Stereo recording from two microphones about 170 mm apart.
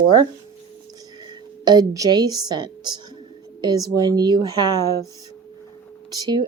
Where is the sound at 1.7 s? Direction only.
20° right (ahead or behind).